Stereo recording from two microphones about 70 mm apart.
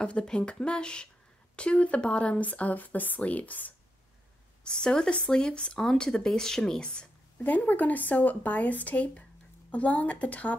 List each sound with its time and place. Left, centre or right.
0.0 s speech: centre
4.6 s speech: centre